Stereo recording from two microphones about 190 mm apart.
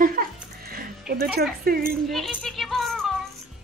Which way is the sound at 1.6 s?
50° right (ahead or behind).